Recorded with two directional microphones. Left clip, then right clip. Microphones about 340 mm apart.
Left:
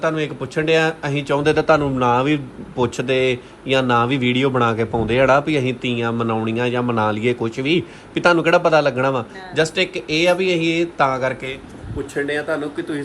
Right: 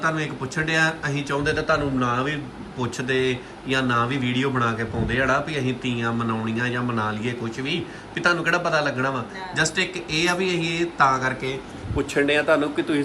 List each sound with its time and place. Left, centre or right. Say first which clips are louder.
0.0 s a man's voice: left 4 dB; centre